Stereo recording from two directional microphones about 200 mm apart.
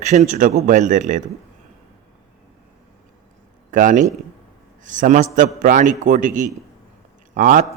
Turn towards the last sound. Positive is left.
turn(degrees=-40)  # may be behind; listen again after turning